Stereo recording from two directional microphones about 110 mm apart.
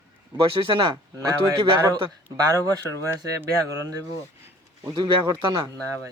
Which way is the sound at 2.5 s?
30° right (ahead or behind).